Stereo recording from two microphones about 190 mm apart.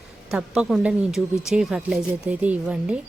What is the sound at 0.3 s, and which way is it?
A woman's voice, 5° right (ahead or behind).